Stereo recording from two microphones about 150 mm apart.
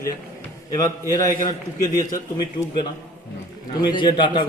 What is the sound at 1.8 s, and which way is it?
Speech, 20° left (ahead or behind).